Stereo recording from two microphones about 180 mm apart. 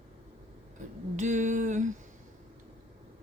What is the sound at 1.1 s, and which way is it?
Speech, 45° right (ahead or behind).